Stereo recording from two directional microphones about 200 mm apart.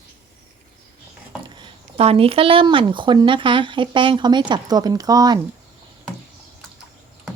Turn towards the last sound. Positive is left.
turn(degrees=-20)  # may be behind; listen again after turning